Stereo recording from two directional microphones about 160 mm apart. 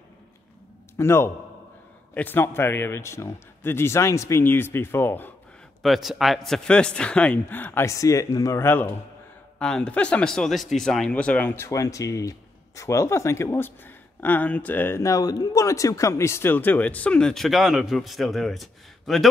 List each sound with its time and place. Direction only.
0.9 s speech: 15° left (ahead or behind)
5.8 s speech: centre (ahead or behind)